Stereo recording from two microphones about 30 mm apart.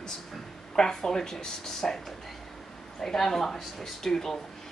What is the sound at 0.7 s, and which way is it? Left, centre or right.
Speech, centre.